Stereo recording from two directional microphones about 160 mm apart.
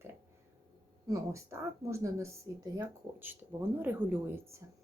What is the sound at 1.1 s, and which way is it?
A woman's voice, 20° right (ahead or behind).